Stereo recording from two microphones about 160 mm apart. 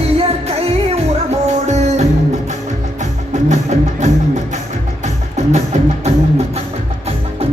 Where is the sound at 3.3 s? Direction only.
45° right (ahead or behind).